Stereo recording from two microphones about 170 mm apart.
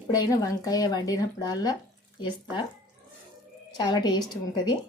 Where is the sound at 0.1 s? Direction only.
20° left (ahead or behind).